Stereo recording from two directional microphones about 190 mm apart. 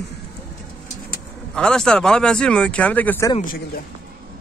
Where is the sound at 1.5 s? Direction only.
5° left (ahead or behind).